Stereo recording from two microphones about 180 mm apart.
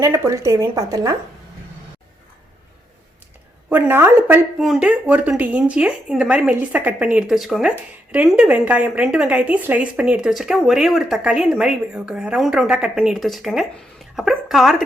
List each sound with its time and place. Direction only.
0.0 s speech: 15° right (ahead or behind)
3.7 s a woman's voice: 10° right (ahead or behind)